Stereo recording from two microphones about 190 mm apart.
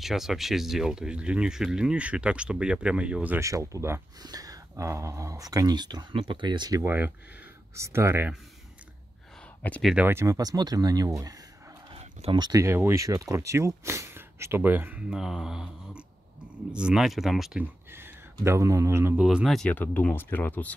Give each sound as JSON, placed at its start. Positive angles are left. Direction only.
{"t": 0.0, "sound": "speech", "side_deg": 0}
{"t": 9.6, "sound": "speech", "side_deg": 5}
{"t": 9.9, "sound": "speech", "side_deg": -10}
{"t": 11.9, "sound": "speech", "side_deg": -30}
{"t": 16.7, "sound": "speech", "side_deg": -5}
{"t": 19.2, "sound": "speech", "side_deg": 0}